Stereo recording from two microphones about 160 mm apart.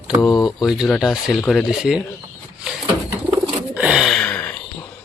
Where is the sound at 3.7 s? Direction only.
5° right (ahead or behind).